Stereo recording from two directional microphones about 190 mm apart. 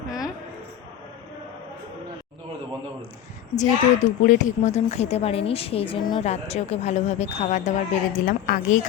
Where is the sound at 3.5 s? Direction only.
40° left (ahead or behind).